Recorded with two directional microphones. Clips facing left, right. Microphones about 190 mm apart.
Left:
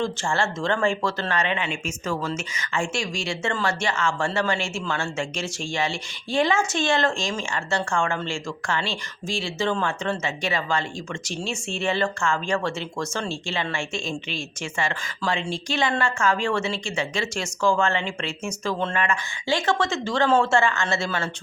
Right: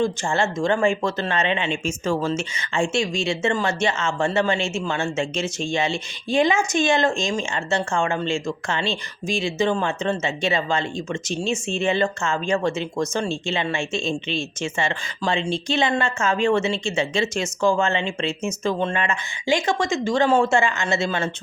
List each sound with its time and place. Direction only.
0.0 s speech: 15° right (ahead or behind)